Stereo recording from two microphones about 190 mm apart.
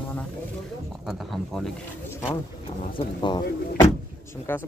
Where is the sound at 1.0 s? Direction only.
Centre (ahead or behind).